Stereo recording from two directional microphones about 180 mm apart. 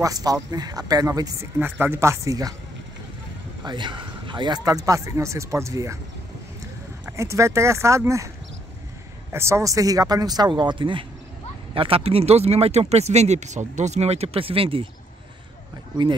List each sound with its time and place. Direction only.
0.0 s speech: 20° right (ahead or behind)
3.6 s speech: 25° right (ahead or behind)
7.1 s speech: 15° right (ahead or behind)
9.3 s speech: 15° right (ahead or behind)